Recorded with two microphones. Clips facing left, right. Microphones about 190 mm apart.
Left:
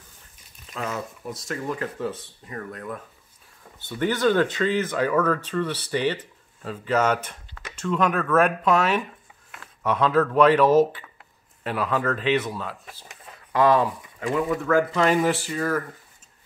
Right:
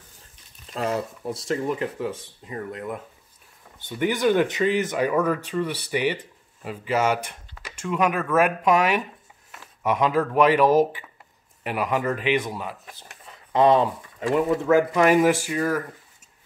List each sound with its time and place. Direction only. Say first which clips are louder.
0.7 s speech: right 5 dB; 35° right (ahead or behind)
1.7 s speech: right 2 dB; 15° right (ahead or behind)